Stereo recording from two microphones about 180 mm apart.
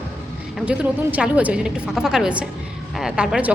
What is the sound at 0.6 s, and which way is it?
A woman's voice, 5° right (ahead or behind).